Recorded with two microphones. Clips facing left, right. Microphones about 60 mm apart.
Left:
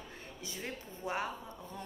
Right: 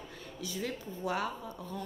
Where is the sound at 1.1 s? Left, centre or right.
Left.